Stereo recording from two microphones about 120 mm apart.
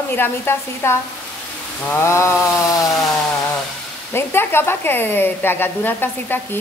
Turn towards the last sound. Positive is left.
turn(degrees=15)  # may be behind; listen again after turning